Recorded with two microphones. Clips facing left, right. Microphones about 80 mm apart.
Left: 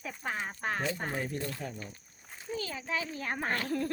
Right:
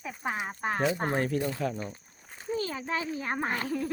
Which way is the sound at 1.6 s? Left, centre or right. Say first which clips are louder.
Right 9 dB; right.